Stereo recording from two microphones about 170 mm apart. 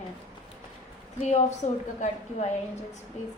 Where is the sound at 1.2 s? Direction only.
40° left (ahead or behind).